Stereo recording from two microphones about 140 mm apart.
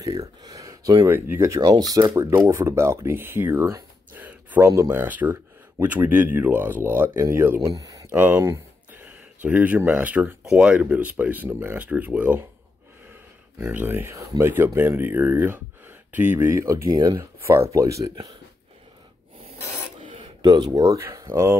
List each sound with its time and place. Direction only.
0.0 s speech: 25° right (ahead or behind)
4.6 s speech: 25° right (ahead or behind)
8.1 s a sound: 15° right (ahead or behind)
9.0 s speech: 10° right (ahead or behind); by 18.3 s 30° right (ahead or behind)
20.7 s speech: 25° right (ahead or behind)